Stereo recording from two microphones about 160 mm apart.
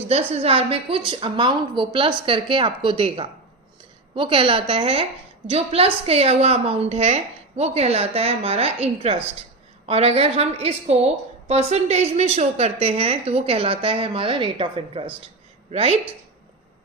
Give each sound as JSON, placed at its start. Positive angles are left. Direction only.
{"t": 0.1, "sound": "a woman's voice", "side_deg": -40}